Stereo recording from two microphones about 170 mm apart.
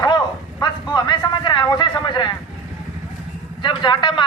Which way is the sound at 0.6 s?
25° left (ahead or behind).